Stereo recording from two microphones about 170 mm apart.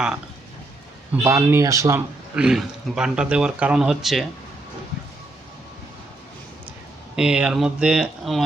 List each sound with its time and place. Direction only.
1.1 s speech: 15° right (ahead or behind)
2.3 s speech: 5° right (ahead or behind)
7.2 s speech: 5° right (ahead or behind)